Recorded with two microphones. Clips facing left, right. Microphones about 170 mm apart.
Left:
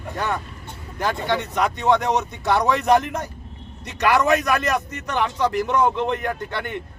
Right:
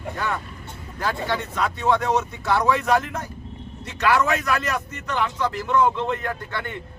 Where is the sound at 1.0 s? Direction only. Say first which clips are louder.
Left 3 dB; 20° left (ahead or behind).